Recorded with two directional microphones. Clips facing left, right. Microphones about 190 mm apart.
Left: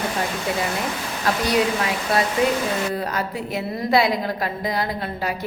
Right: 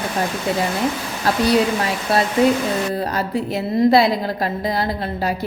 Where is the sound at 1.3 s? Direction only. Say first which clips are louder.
Right 3 dB; 35° right (ahead or behind).